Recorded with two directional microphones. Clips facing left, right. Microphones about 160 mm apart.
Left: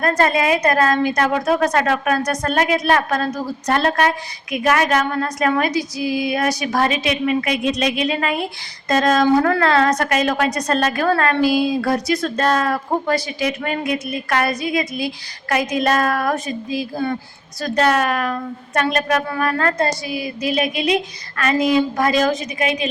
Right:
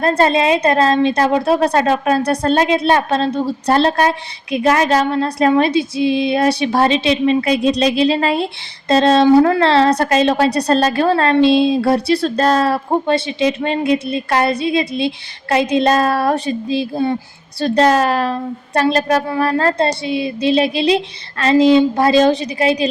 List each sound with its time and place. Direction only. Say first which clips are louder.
0.0 s a woman's voice: right 3 dB; 30° right (ahead or behind)